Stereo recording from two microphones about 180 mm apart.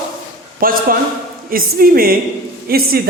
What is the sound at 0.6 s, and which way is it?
A woman's voice, 55° right (ahead or behind).